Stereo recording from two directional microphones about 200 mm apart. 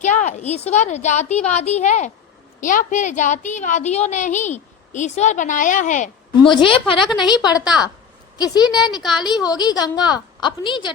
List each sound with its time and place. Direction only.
0.0 s a woman's voice: 35° left (ahead or behind)
6.3 s a woman's voice: 25° left (ahead or behind)
7.6 s a woman's voice: 5° right (ahead or behind)
8.7 s a woman's voice: 20° left (ahead or behind)
9.0 s a woman's voice: centre (ahead or behind)
9.4 s a woman's voice: 20° left (ahead or behind)